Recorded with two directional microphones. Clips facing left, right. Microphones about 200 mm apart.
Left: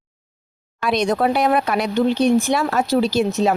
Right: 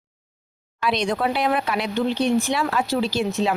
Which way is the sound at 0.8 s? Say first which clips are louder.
Left 4 dB; 45° left (ahead or behind).